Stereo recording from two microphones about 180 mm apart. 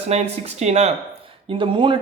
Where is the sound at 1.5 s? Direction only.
30° right (ahead or behind).